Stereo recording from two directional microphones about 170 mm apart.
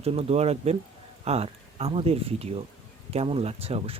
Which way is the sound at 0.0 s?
35° right (ahead or behind).